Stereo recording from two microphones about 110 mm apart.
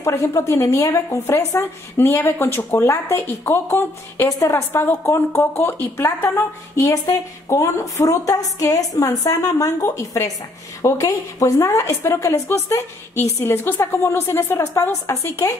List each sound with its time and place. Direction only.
0.0 s a woman's voice: 25° left (ahead or behind)